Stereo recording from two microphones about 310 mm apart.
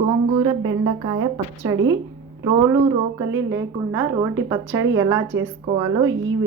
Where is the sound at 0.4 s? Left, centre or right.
Centre.